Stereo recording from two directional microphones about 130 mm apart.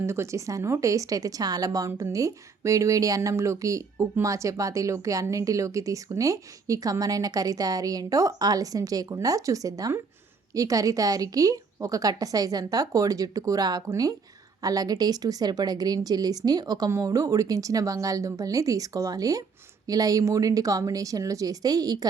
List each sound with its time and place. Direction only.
0.0 s speech: 20° right (ahead or behind)